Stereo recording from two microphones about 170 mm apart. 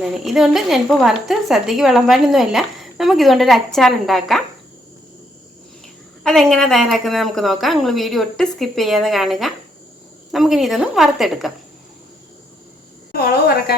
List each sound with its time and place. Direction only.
0.0 s a woman's voice: centre (ahead or behind)
6.2 s a woman's voice: centre (ahead or behind)
13.1 s a sound: 65° left (ahead or behind)